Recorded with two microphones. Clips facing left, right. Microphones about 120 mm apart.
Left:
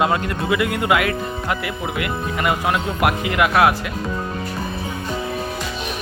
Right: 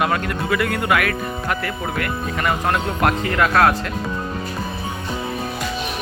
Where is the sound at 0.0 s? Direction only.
20° left (ahead or behind).